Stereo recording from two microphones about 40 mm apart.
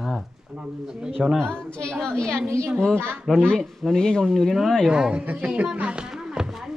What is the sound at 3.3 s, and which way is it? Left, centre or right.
Speech, centre.